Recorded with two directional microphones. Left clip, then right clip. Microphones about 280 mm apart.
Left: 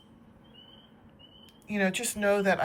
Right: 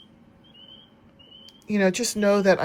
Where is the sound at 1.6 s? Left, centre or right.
Centre.